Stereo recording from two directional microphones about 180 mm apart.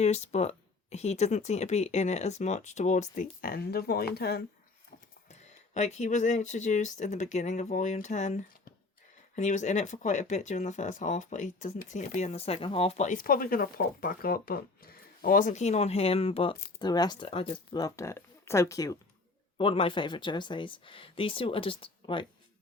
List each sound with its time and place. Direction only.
0.0 s speech: 35° left (ahead or behind); by 4.4 s 60° left (ahead or behind)
5.3 s speech: 40° left (ahead or behind); by 18.9 s 20° left (ahead or behind)
19.5 s speech: 30° left (ahead or behind)